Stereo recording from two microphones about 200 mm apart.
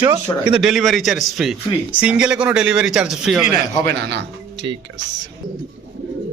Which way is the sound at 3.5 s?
55° right (ahead or behind).